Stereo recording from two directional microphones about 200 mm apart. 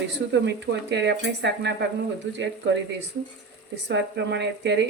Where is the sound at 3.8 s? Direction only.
60° right (ahead or behind).